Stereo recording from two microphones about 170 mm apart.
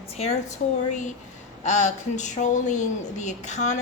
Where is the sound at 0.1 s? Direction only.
40° left (ahead or behind).